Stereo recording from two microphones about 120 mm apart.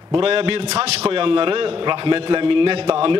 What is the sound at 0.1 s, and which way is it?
A man's voice, 50° right (ahead or behind).